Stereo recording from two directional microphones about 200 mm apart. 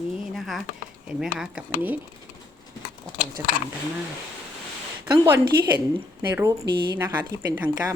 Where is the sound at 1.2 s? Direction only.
5° right (ahead or behind).